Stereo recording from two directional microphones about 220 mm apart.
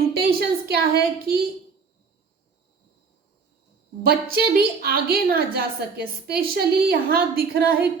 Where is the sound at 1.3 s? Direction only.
45° right (ahead or behind).